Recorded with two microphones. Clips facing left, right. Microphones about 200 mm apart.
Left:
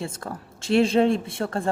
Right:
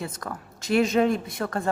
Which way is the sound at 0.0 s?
30° left (ahead or behind).